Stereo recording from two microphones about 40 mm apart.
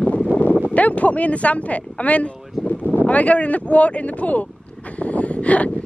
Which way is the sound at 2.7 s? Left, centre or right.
Left.